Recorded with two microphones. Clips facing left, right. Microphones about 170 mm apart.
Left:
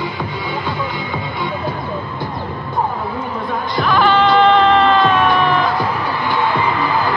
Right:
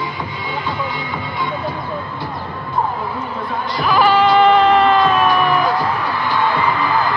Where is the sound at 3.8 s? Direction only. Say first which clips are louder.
Right 1 dB; 5° right (ahead or behind).